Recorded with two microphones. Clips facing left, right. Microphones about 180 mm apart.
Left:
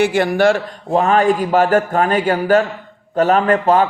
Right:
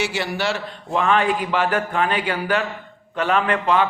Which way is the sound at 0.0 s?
50° left (ahead or behind).